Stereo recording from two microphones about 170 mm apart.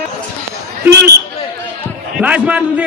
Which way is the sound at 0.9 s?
75° right (ahead or behind).